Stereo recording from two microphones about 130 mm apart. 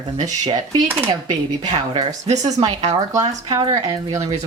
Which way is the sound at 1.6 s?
35° right (ahead or behind).